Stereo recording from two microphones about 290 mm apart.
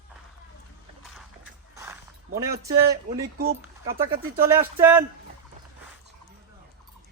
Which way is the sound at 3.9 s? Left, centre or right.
Right.